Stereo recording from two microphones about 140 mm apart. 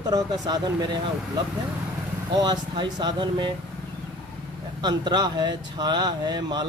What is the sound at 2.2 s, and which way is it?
Speech, 30° right (ahead or behind).